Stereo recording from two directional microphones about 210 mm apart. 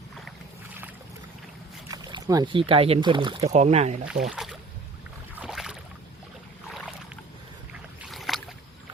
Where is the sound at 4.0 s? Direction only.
5° right (ahead or behind).